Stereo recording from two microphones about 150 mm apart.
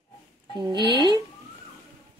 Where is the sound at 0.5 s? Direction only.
30° right (ahead or behind).